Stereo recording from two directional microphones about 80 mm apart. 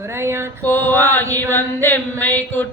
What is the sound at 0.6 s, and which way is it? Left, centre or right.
Mantra, left.